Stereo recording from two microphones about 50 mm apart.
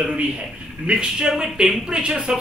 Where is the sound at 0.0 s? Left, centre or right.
Right.